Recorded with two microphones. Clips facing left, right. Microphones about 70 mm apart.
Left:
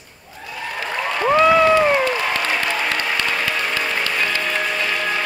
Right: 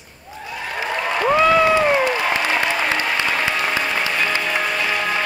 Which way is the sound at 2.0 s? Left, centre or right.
Centre.